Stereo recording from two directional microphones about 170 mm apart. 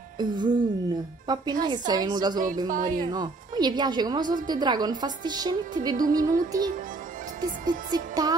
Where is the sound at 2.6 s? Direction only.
50° right (ahead or behind).